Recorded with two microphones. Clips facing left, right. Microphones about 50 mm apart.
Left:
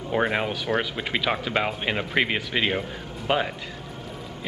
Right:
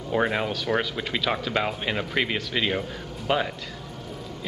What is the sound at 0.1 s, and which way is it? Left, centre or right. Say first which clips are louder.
Speech: even; centre.